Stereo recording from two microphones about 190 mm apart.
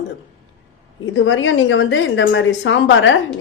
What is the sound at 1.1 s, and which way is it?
A woman's voice, 85° left.